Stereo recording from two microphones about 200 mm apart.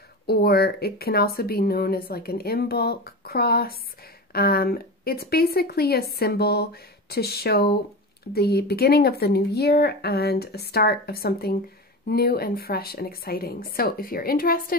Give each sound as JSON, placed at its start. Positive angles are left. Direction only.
{"t": 0.3, "sound": "speech", "side_deg": 50}